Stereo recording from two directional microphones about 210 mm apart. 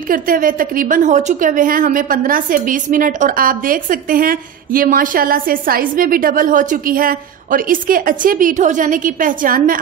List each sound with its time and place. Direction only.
0.1 s a woman's voice: 40° right (ahead or behind)